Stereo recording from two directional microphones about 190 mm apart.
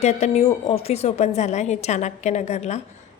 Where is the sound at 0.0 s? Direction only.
35° left (ahead or behind).